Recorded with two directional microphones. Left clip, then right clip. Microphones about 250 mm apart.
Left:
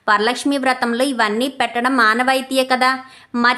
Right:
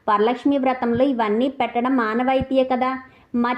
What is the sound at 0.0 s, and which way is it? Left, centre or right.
A woman's voice, left.